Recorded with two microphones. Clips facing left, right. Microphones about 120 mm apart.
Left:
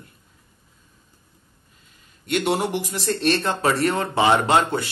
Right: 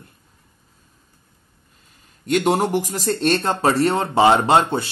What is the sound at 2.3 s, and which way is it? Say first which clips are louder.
Speech: right 4 dB; 45° right (ahead or behind).